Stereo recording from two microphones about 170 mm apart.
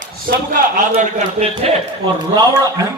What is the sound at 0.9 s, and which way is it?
Speech, 40° right (ahead or behind).